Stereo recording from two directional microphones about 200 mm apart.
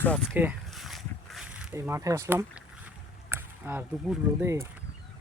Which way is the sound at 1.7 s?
15° right (ahead or behind).